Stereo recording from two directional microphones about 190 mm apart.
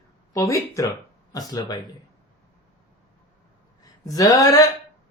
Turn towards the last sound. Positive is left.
turn(degrees=15)  # may be behind; listen again after turning